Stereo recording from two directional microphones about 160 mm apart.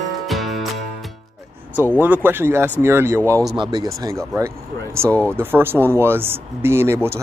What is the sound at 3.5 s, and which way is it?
Speech, 30° right (ahead or behind).